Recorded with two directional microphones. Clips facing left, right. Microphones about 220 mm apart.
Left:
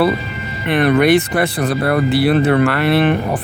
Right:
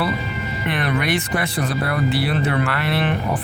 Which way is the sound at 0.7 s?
60° left (ahead or behind).